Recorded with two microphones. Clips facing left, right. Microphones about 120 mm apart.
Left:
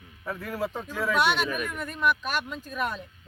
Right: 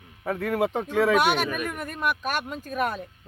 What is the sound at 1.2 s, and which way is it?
Speech, 45° right (ahead or behind).